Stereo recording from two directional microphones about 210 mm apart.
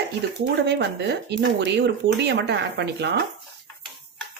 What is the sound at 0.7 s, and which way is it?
Speech, 50° right (ahead or behind).